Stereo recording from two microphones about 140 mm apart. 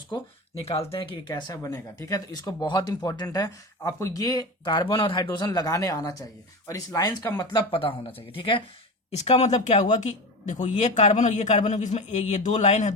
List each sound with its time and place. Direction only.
0.9 s speech: 30° left (ahead or behind)
7.7 s speech: 40° left (ahead or behind)
9.1 s a man's voice: 50° left (ahead or behind)